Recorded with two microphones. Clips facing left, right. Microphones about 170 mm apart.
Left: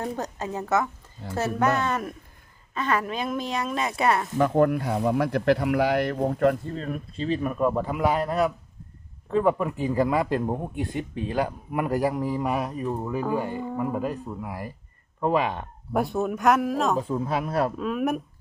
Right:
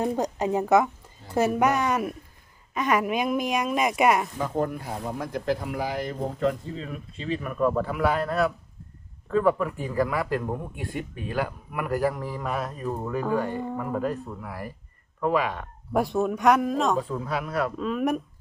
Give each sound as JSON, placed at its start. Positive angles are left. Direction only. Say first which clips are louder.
{"t": 0.0, "sound": "speech", "louder": "right 5 dB", "side_deg": -15}
{"t": 4.4, "sound": "speech", "louder": "left 7 dB", "side_deg": 65}
{"t": 7.3, "sound": "speech", "louder": "left 3 dB", "side_deg": 30}
{"t": 7.6, "sound": "speech", "louder": "right 2 dB", "side_deg": 20}
{"t": 15.9, "sound": "speech", "louder": "right 1 dB", "side_deg": 0}
{"t": 17.0, "sound": "speech", "louder": "left 3 dB", "side_deg": 25}
{"t": 17.7, "sound": "speech", "louder": "even", "side_deg": 5}